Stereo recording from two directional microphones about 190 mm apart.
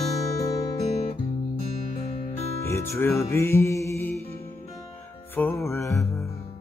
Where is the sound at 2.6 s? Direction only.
15° left (ahead or behind).